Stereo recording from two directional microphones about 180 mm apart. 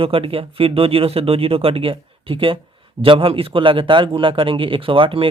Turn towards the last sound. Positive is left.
turn(degrees=-30)  # may be behind; listen again after turning